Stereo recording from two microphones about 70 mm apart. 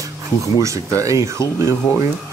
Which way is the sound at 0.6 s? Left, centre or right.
Right.